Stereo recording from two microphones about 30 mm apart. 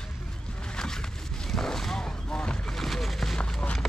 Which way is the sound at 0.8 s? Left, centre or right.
Centre.